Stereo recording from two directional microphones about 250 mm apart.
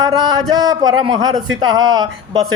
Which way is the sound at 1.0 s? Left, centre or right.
Centre.